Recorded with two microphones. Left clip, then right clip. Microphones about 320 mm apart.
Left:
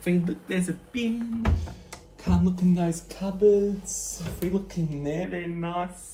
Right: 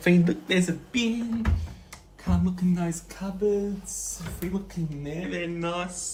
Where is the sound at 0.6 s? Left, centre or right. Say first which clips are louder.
Right 4 dB; centre.